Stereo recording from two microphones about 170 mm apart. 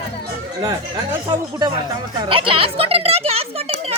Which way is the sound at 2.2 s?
30° right (ahead or behind).